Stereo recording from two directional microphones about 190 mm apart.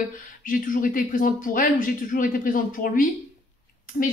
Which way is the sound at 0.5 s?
45° left (ahead or behind).